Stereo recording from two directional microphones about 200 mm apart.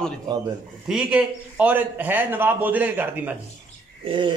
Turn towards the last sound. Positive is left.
turn(degrees=-25)  # may be behind; listen again after turning